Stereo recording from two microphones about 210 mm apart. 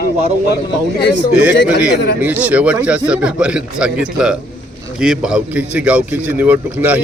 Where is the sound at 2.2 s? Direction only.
5° right (ahead or behind).